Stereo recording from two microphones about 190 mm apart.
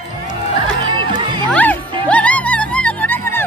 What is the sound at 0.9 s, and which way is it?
Music, 25° right (ahead or behind).